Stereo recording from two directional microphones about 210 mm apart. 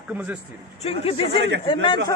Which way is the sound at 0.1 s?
5° right (ahead or behind).